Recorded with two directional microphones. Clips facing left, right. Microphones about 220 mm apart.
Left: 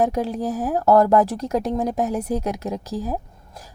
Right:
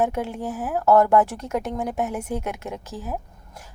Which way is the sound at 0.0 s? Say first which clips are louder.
Left 3 dB; 35° left (ahead or behind).